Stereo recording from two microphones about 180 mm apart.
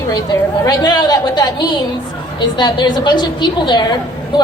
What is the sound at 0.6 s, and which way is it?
A woman's voice, 20° left (ahead or behind).